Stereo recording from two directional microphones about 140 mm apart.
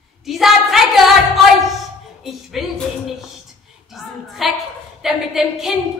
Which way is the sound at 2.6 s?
Centre (ahead or behind).